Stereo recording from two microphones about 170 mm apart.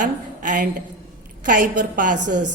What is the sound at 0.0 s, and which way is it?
A woman's voice, 50° right (ahead or behind).